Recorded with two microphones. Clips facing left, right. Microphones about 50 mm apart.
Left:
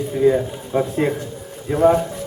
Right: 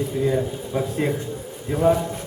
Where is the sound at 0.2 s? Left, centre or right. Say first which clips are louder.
Left 7 dB; centre.